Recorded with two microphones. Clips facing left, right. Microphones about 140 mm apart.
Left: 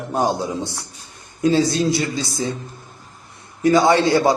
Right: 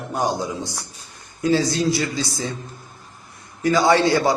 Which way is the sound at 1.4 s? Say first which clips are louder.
Left 2 dB; 20° left (ahead or behind).